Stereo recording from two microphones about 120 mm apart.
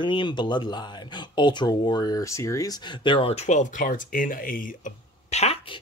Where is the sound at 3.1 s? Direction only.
50° left (ahead or behind); by 4.0 s 90° left.